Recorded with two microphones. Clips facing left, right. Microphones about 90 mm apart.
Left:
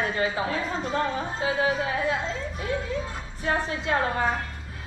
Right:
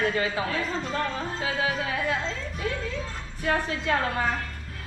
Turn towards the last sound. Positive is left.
turn(degrees=20)  # may be behind; listen again after turning